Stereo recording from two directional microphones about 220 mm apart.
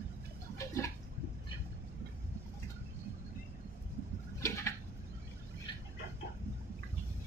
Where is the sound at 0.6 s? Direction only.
15° left (ahead or behind).